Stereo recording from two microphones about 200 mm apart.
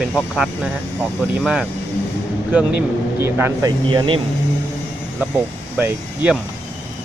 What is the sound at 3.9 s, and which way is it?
Speech, 25° right (ahead or behind).